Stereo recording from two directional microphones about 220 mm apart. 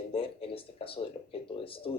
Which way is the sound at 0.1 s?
25° left (ahead or behind).